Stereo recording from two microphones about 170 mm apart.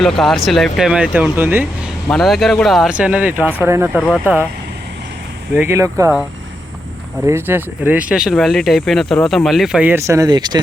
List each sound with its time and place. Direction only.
0.2 s speech: centre (ahead or behind)
2.0 s speech: centre (ahead or behind)
5.5 s speech: 15° right (ahead or behind)
7.3 s speech: 15° right (ahead or behind)